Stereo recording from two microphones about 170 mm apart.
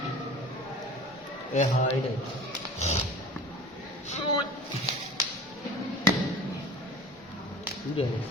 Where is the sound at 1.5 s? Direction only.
40° left (ahead or behind).